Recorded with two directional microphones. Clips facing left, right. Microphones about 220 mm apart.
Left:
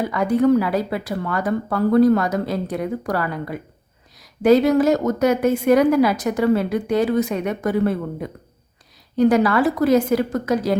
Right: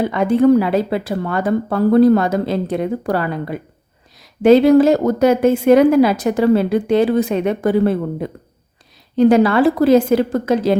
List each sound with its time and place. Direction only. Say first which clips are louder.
0.0 s a woman's voice: right 4 dB; 25° right (ahead or behind)